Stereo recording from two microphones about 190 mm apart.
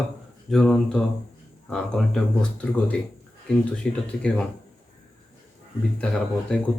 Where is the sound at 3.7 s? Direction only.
5° left (ahead or behind).